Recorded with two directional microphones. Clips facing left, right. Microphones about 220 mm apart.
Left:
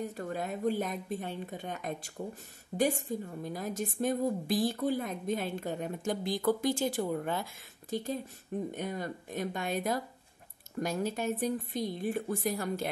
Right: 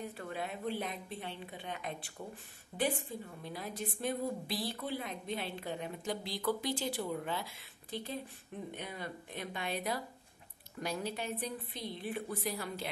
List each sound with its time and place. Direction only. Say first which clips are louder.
0.0 s a woman's voice: left 5 dB; 45° left (ahead or behind)